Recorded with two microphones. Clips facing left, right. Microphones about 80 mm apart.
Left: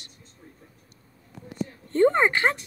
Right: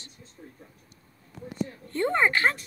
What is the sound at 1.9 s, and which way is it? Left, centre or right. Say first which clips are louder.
Speech: left 5 dB; left.